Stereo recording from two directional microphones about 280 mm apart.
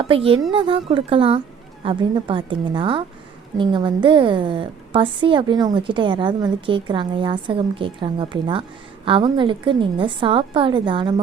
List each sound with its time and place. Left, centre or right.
0.0 s a woman's voice: centre